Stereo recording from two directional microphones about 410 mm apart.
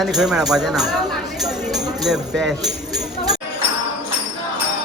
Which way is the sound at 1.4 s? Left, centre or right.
Centre.